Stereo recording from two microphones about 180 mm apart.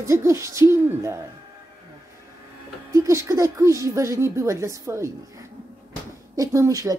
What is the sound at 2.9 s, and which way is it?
A woman's voice, 15° right (ahead or behind).